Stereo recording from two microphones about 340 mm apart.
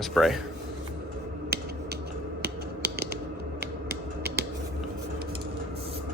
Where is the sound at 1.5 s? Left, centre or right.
Right.